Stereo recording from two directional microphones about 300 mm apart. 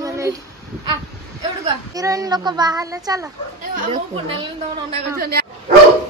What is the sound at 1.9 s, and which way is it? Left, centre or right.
A child's voice, centre.